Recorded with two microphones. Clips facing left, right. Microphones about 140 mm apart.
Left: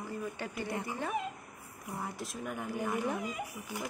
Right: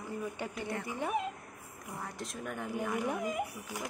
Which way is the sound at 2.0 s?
5° left (ahead or behind).